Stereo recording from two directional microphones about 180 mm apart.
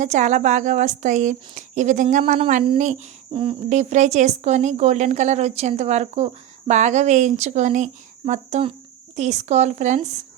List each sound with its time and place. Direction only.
0.0 s a woman's voice: 40° right (ahead or behind)